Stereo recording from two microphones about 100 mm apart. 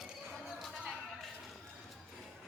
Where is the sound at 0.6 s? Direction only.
Centre (ahead or behind).